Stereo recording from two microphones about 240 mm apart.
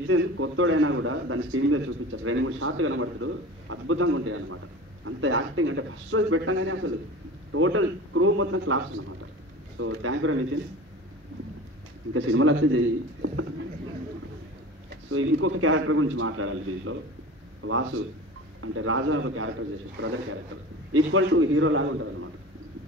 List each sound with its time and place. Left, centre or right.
0.1 s a man's voice: right
12.1 s a man's voice: right
15.0 s a man's voice: right
20.9 s a man's voice: right